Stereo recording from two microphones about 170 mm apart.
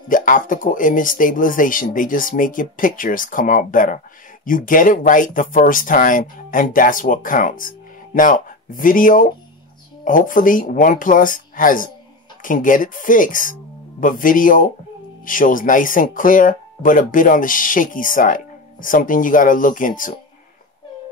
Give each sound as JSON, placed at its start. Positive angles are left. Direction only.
{"t": 0.1, "sound": "speech", "side_deg": 50}